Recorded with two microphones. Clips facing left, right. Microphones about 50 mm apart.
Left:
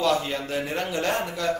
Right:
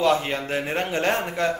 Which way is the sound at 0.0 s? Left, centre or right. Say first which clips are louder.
Right 3 dB; right.